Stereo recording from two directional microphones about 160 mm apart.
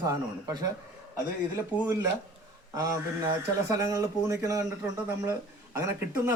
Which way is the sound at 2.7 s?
20° right (ahead or behind).